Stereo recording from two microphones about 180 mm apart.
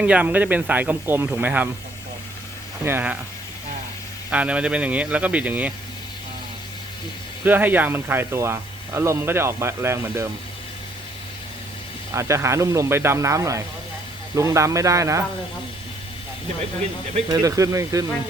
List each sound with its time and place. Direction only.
0.0 s speech: 10° right (ahead or behind)
2.8 s speech: 10° right (ahead or behind)
4.3 s speech: 5° right (ahead or behind)
7.4 s speech: 10° right (ahead or behind)
12.1 s speech: 15° right (ahead or behind)
17.2 s speech: 20° right (ahead or behind)